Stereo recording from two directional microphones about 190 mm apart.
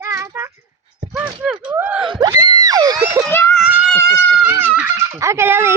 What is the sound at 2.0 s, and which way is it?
Speech, 25° right (ahead or behind).